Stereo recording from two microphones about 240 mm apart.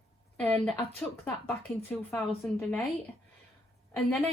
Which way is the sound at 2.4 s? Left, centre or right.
Centre.